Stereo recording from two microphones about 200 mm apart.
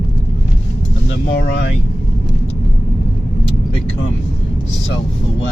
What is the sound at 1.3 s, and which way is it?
Speech, 60° left (ahead or behind).